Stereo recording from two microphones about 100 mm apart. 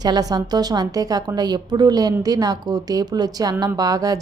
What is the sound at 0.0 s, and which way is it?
A woman's voice, 40° right (ahead or behind).